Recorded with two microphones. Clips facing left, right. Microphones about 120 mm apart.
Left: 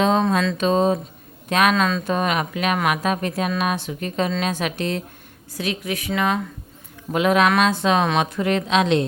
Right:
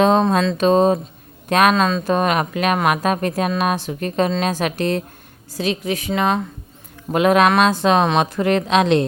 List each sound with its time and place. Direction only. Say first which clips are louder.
0.2 s a sound: right 3 dB; 35° right (ahead or behind)
1.5 s speech: right 3 dB; 45° right (ahead or behind)
1.7 s speech: right 3 dB; 35° right (ahead or behind)
5.5 s speech: right 4 dB; 30° right (ahead or behind)
7.1 s speech: right 3 dB; 50° right (ahead or behind)
7.5 s a sound: right 3 dB; 40° right (ahead or behind)
8.0 s speech: right 3 dB; 30° right (ahead or behind)
8.4 s speech: right 3 dB; 50° right (ahead or behind)